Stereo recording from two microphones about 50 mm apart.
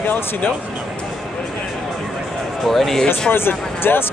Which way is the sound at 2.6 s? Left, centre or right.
Centre.